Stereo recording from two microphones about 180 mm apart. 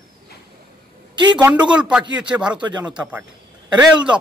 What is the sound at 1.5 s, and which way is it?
Speech, 5° right (ahead or behind).